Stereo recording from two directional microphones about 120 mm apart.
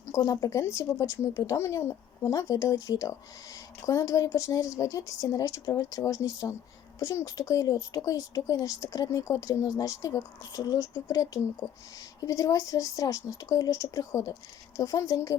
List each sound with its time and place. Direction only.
0.0 s speech: 25° left (ahead or behind)